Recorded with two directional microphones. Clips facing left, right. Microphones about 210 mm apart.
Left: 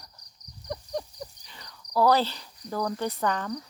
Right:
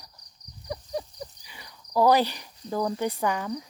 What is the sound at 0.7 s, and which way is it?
Cricket, 5° right (ahead or behind).